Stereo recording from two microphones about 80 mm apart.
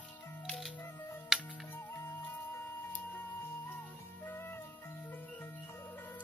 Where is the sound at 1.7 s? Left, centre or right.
Left.